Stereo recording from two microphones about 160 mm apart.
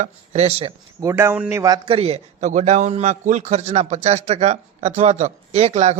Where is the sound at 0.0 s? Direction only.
40° right (ahead or behind).